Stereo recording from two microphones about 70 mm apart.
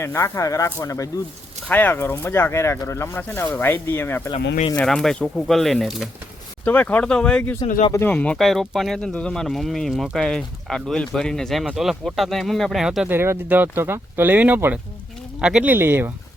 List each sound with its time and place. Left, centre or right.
0.0 s speech: left
1.6 s speech: left
3.2 s speech: left
4.8 s speech: centre
6.7 s speech: left
7.0 s speech: centre
8.4 s speech: centre
9.0 s speech: centre
11.6 s speech: centre
12.8 s speech: centre
13.1 s speech: right
15.4 s speech: centre
15.7 s speech: right